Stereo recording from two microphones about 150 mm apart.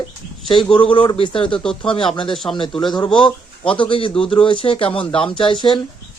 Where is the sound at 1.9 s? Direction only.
35° left (ahead or behind).